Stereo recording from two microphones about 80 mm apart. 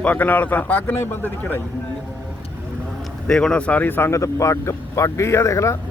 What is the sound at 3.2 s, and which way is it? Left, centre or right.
Speech, centre.